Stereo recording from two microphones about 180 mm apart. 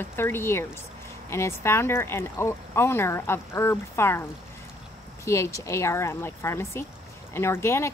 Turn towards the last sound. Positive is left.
turn(degrees=15)  # may be behind; listen again after turning